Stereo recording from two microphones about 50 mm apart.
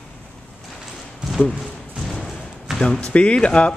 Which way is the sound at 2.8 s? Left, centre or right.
Centre.